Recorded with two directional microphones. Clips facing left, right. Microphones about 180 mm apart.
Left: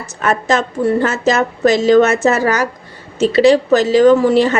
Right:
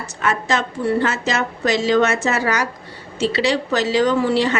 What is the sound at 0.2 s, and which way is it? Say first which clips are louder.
A woman's voice: left 5 dB; 45° left (ahead or behind).